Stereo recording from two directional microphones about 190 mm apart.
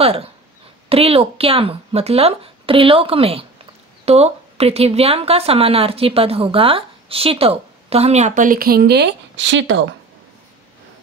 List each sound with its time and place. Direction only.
0.0 s a woman's voice: 30° right (ahead or behind); by 9.8 s 75° right (ahead or behind)